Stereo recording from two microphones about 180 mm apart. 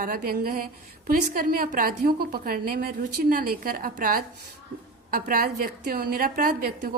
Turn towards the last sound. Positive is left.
turn(degrees=-50)  # may be behind; listen again after turning